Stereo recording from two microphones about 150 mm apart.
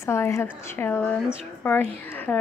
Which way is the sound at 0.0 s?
20° left (ahead or behind).